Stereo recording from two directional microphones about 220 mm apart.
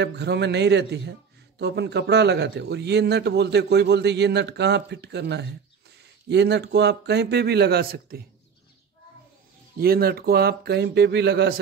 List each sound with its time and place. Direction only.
0.0 s a man's voice: 50° right (ahead or behind)
9.8 s a man's voice: 45° right (ahead or behind)